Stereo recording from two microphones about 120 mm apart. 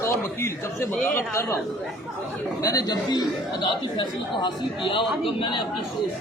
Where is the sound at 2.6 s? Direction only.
30° left (ahead or behind).